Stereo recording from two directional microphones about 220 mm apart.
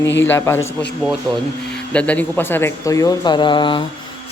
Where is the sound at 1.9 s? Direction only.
5° left (ahead or behind); by 3.9 s 20° left (ahead or behind).